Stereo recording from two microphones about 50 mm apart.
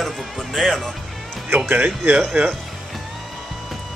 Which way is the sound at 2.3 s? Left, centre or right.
Right.